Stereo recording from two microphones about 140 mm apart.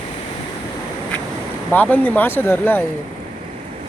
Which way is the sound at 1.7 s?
10° left (ahead or behind).